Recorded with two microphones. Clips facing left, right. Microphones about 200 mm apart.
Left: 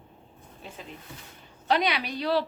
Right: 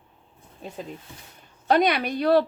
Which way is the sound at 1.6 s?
50° right (ahead or behind).